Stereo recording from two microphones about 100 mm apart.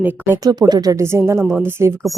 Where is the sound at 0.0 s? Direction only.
20° right (ahead or behind).